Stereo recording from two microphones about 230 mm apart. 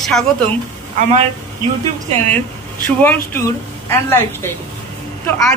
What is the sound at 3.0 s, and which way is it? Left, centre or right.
A woman's voice, centre.